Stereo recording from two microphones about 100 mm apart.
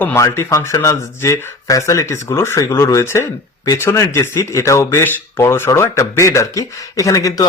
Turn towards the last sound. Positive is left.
turn(degrees=35)  # may be behind; listen again after turning